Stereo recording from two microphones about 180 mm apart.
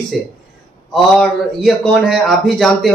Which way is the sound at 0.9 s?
Centre (ahead or behind).